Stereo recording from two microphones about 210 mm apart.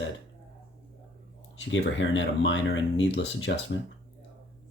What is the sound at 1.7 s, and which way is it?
Speech, 60° left (ahead or behind).